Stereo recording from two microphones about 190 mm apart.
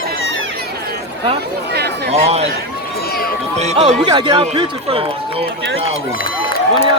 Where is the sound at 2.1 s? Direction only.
30° right (ahead or behind).